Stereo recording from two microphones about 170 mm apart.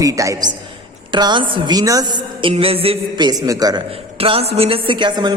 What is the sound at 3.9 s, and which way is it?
A man's voice, 35° right (ahead or behind).